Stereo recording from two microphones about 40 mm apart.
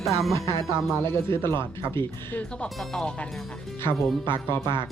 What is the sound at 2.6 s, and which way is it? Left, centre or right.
Speech, centre.